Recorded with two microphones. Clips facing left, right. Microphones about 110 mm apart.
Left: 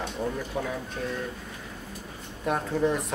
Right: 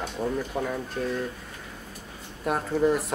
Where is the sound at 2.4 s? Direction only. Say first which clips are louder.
Right 2 dB; 5° right (ahead or behind).